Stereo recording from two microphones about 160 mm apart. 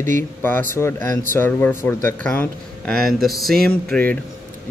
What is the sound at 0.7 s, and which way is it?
Speech, 15° left (ahead or behind).